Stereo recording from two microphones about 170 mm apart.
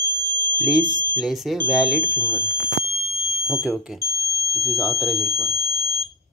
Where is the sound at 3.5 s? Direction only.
5° right (ahead or behind).